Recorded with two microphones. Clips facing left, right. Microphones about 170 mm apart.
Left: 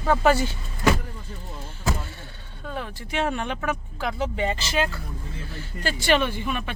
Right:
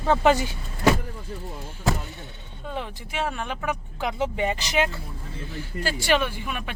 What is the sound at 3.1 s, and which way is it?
Speech, 5° right (ahead or behind).